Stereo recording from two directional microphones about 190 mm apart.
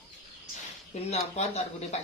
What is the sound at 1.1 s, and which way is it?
Speech, 35° left (ahead or behind).